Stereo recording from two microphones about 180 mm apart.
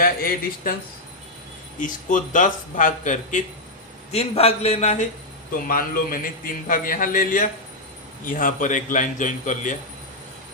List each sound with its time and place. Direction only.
0.0 s a man's voice: 55° left (ahead or behind)
1.8 s a man's voice: 45° left (ahead or behind)
5.6 s a man's voice: 50° left (ahead or behind)